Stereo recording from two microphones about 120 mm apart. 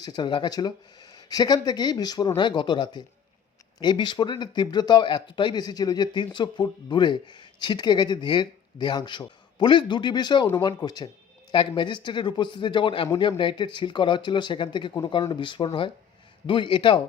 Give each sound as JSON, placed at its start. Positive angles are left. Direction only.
{"t": 0.0, "sound": "speech", "side_deg": 35}